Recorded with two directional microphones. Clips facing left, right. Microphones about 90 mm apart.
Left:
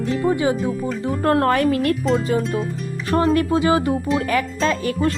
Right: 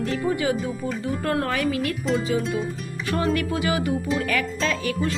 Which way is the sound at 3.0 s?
35° left (ahead or behind).